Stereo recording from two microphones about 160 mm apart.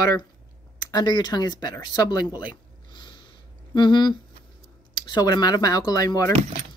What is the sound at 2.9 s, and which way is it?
Snort, 30° left (ahead or behind).